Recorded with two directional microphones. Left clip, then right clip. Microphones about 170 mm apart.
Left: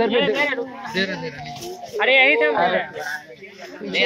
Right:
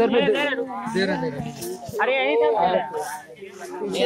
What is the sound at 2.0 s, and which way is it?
Speech, 5° left (ahead or behind).